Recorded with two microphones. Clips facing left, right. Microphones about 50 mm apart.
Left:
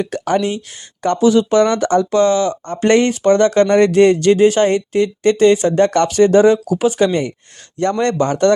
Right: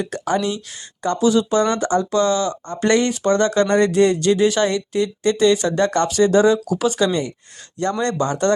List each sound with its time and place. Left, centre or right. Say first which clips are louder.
0.0 s speech: left 4 dB; left
2.1 s speech: left 4 dB; left
7.8 s speech: left 4 dB; left